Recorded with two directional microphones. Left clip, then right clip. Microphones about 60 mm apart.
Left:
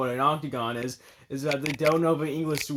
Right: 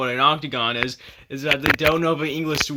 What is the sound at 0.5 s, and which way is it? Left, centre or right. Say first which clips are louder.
Speech: right 8 dB; right.